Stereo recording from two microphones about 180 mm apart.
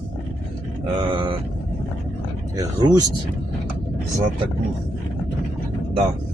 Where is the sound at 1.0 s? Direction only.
25° right (ahead or behind).